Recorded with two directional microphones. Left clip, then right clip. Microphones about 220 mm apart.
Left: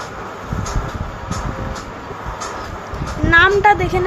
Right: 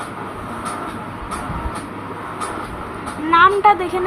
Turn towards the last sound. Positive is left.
turn(degrees=30)  # may be behind; listen again after turning